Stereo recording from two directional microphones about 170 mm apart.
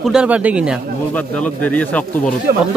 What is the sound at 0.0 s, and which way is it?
Speech, 5° right (ahead or behind).